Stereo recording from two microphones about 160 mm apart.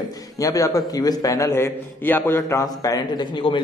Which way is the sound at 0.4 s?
20° left (ahead or behind).